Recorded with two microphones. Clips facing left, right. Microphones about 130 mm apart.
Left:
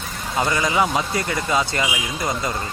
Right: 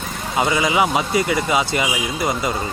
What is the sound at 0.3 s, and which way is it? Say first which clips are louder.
Speech: right 2 dB; 10° right (ahead or behind).